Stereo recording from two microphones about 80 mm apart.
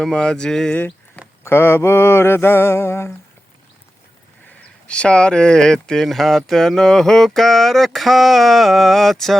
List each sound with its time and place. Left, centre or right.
0.0 s speech: centre
1.5 s mantra: left
4.9 s speech: centre
7.3 s a sound: centre